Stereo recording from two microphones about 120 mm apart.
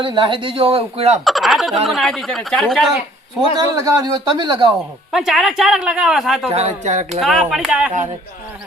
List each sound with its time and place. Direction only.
0.0 s speech: 45° right (ahead or behind); by 1.2 s 60° right (ahead or behind)
1.2 s fowl: centre (ahead or behind)
1.9 s speech: centre (ahead or behind)
3.8 s speech: 30° right (ahead or behind)
5.1 s speech: centre (ahead or behind)
6.5 s speech: 65° right (ahead or behind)
7.2 s speech: centre (ahead or behind)